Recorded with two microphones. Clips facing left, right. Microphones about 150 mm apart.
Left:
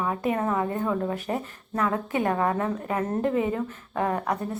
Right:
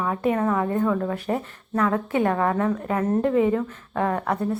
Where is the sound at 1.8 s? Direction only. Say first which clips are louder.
Right 3 dB; 20° left (ahead or behind).